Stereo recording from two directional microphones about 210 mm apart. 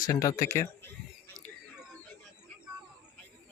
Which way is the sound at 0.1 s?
15° left (ahead or behind).